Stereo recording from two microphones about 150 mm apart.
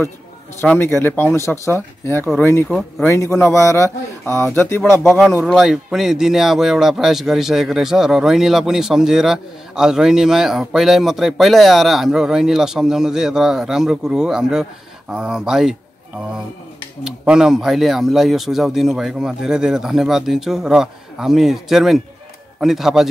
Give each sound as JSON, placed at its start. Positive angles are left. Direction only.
{"t": 0.6, "sound": "speech", "side_deg": 15}
{"t": 5.0, "sound": "speech", "side_deg": 0}
{"t": 17.0, "sound": "speech", "side_deg": -5}